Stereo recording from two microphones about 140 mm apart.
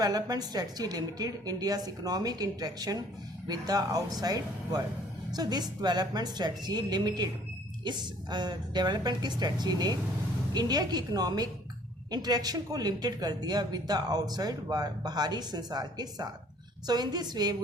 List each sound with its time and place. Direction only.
0.0 s a woman's voice: 25° right (ahead or behind)